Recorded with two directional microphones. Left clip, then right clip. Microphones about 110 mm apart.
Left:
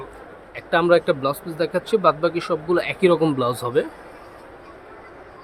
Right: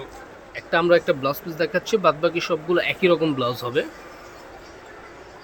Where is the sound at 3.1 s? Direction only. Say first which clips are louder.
Left 2 dB; 30° left (ahead or behind).